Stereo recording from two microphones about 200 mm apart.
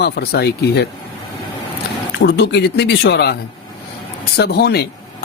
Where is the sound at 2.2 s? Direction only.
60° left (ahead or behind).